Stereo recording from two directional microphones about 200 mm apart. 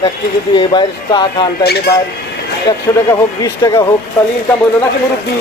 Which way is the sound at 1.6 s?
55° left (ahead or behind).